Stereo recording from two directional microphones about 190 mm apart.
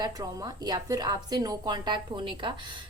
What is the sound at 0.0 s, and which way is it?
Speech, 20° right (ahead or behind).